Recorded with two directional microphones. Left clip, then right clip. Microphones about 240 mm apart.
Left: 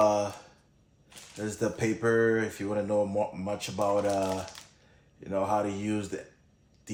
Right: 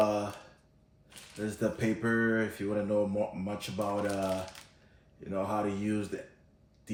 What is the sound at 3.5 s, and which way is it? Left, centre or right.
Speech, left.